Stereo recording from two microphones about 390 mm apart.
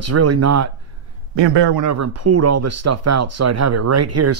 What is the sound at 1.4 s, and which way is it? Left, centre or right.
Speech, right.